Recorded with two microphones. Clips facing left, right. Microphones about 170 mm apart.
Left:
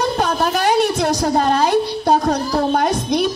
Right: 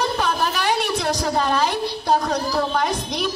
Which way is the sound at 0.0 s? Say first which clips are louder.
Left 4 dB; 45° left (ahead or behind).